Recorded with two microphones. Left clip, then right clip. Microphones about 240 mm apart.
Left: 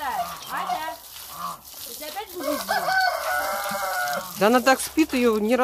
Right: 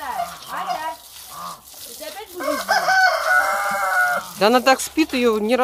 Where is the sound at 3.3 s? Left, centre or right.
Right.